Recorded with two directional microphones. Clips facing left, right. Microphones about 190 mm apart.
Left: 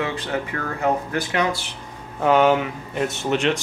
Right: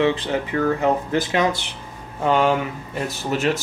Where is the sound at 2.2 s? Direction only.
Centre (ahead or behind).